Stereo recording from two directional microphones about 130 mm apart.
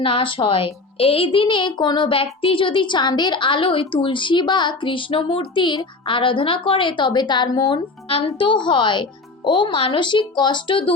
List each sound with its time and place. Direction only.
0.0 s speech: 45° left (ahead or behind)